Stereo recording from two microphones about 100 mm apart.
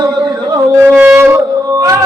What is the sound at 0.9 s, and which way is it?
Wind instrument, 20° right (ahead or behind).